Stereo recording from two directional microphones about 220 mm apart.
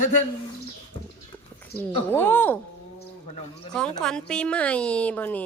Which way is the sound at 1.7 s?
10° left (ahead or behind).